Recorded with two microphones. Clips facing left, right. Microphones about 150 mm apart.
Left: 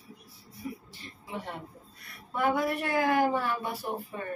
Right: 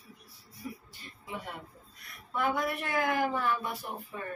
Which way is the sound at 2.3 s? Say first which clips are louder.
Left 3 dB; 35° left (ahead or behind).